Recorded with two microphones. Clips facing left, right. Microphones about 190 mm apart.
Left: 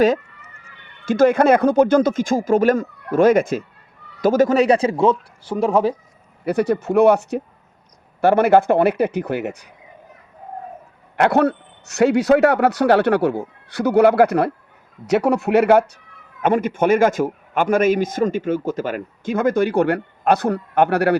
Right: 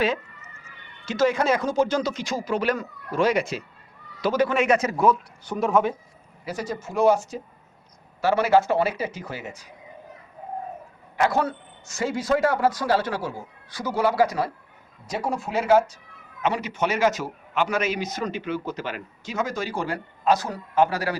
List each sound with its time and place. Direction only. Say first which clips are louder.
1.0 s a man's voice: left 8 dB; 55° left (ahead or behind); by 5.9 s 30° left (ahead or behind)
6.4 s speech: left 12 dB; 60° left (ahead or behind)
11.2 s speech: left 7 dB; 65° left (ahead or behind)
15.0 s speech: left 11 dB; 70° left (ahead or behind)
16.4 s a man's voice: left 8 dB; 50° left (ahead or behind)